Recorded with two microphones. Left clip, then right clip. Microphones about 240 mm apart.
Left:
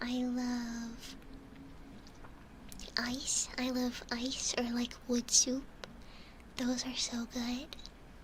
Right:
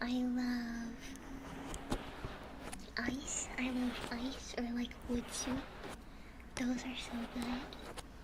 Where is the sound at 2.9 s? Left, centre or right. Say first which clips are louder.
Left 5 dB; left.